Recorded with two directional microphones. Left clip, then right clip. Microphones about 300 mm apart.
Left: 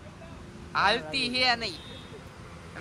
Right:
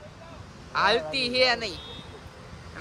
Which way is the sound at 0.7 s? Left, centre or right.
Centre.